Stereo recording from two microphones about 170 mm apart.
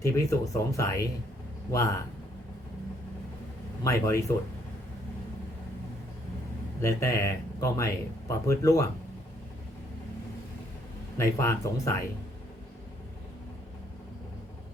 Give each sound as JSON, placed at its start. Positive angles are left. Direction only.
{"t": 0.0, "sound": "speech", "side_deg": 20}
{"t": 3.8, "sound": "speech", "side_deg": 15}
{"t": 6.8, "sound": "speech", "side_deg": 15}
{"t": 11.2, "sound": "speech", "side_deg": 20}